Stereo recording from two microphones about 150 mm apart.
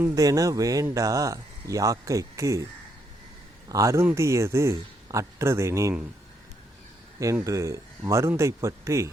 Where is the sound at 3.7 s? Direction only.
20° right (ahead or behind).